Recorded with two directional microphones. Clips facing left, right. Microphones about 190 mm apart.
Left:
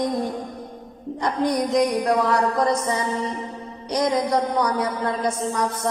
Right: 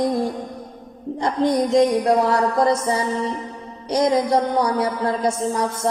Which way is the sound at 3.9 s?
30° right (ahead or behind).